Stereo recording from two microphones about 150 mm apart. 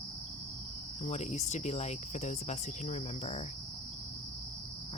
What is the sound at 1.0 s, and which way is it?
Speech, 50° left (ahead or behind).